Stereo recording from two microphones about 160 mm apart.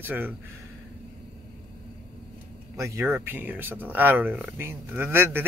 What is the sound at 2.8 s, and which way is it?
Speech, 15° right (ahead or behind).